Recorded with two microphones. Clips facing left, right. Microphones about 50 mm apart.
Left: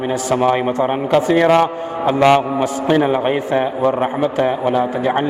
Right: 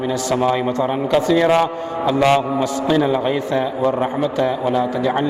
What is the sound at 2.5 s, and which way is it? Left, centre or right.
A man's voice, left.